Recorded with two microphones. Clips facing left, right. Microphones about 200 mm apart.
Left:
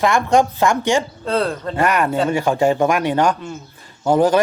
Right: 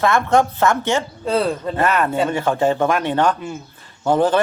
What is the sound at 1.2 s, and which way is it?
Speech, 10° right (ahead or behind).